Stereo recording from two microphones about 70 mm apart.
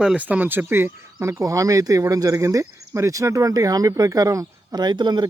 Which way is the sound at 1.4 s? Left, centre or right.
Right.